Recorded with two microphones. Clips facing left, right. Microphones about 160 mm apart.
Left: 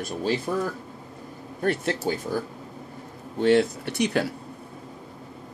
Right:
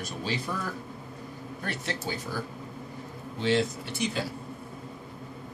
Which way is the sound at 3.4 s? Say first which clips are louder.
Left 7 dB; 60° left (ahead or behind).